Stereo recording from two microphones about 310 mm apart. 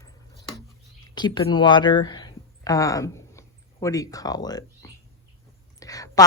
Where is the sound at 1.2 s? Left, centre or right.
Centre.